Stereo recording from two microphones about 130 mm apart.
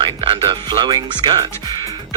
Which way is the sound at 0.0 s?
40° right (ahead or behind).